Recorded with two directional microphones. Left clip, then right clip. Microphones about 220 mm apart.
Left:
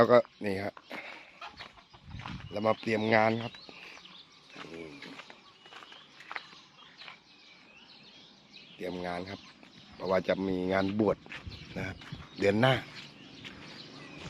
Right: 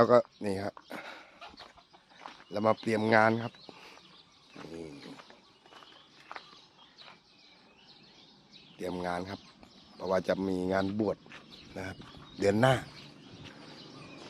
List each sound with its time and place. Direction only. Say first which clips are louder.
0.0 s speech: left 1 dB; 5° right (ahead or behind)
2.5 s speech: right 1 dB; 15° right (ahead or behind)
8.8 s speech: right 2 dB; 10° right (ahead or behind)
11.0 s speech: left 4 dB; 15° left (ahead or behind)
11.7 s speech: left 2 dB; centre (ahead or behind)